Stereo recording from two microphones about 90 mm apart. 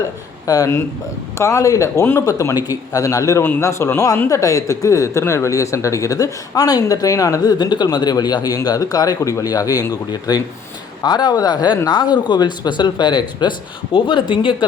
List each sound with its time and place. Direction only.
0.4 s speech: 40° left (ahead or behind)
7.6 s speech: 50° left (ahead or behind)